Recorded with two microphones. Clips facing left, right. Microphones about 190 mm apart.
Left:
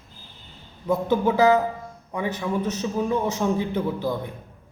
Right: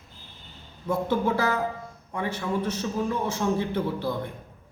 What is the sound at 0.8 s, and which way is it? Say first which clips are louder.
A man's voice: left 3 dB; 15° left (ahead or behind).